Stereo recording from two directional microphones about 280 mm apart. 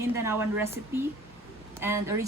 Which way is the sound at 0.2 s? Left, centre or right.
Centre.